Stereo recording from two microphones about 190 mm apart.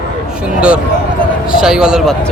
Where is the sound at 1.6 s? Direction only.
5° right (ahead or behind).